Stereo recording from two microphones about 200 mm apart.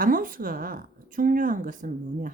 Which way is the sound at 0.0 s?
45° right (ahead or behind).